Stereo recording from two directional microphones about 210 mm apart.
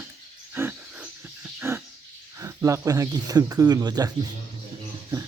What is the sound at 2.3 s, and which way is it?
Speech, 15° right (ahead or behind).